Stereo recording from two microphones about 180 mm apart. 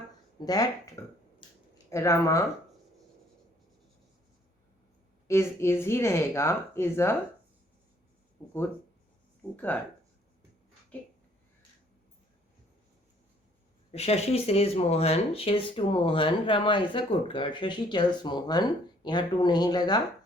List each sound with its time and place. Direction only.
0.3 s speech: 20° left (ahead or behind)
5.3 s speech: 15° left (ahead or behind)
9.6 s speech: 10° left (ahead or behind)
13.9 s speech: 35° left (ahead or behind)